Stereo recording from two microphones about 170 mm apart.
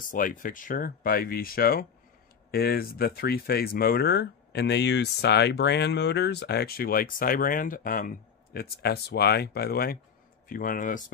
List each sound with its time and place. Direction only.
0.0 s speech: 55° left (ahead or behind)